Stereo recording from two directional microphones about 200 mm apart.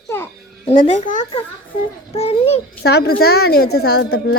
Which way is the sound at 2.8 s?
55° left (ahead or behind).